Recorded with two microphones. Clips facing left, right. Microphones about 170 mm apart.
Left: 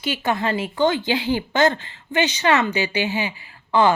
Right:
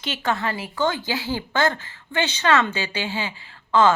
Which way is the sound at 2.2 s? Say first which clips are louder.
Left 1 dB; 15° left (ahead or behind).